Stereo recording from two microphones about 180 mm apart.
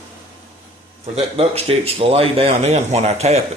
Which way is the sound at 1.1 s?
35° right (ahead or behind).